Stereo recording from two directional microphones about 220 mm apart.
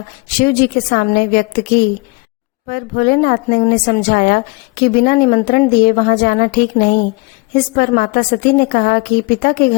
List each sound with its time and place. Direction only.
0.3 s speech: 40° left (ahead or behind)